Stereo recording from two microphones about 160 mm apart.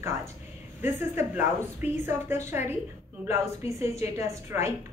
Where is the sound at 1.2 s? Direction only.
15° right (ahead or behind).